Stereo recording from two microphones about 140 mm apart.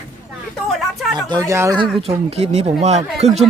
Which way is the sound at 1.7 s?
40° right (ahead or behind).